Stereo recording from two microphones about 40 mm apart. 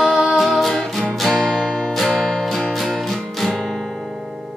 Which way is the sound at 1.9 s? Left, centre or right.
Centre.